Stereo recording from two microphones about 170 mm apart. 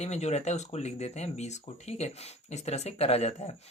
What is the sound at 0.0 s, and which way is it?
Speech, 40° left (ahead or behind).